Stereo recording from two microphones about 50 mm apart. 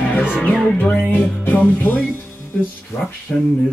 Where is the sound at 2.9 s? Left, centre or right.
Left.